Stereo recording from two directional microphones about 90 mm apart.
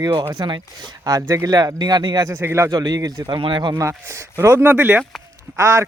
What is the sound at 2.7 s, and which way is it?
Speech, 45° right (ahead or behind).